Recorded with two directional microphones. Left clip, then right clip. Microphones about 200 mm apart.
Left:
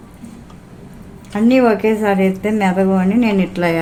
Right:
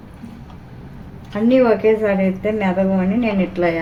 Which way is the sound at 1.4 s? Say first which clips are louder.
Even; 55° left (ahead or behind).